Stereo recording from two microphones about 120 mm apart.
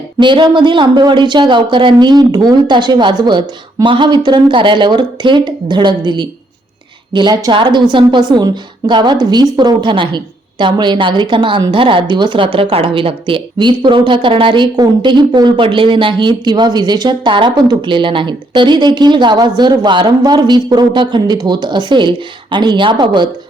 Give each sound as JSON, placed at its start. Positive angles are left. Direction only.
{"t": 0.2, "sound": "speech", "side_deg": -40}